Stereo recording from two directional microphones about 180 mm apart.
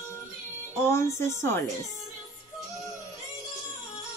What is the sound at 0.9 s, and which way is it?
Speech, 15° left (ahead or behind).